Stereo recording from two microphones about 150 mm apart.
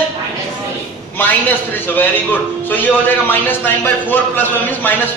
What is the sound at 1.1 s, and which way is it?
A man's voice, 10° left (ahead or behind).